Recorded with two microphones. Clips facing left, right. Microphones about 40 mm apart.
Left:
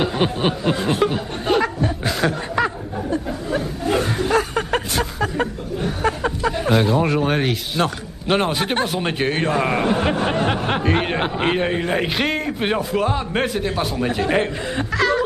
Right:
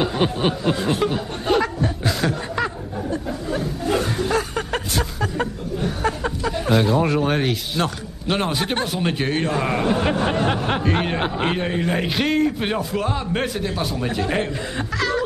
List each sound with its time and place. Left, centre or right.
0.0 s speech: left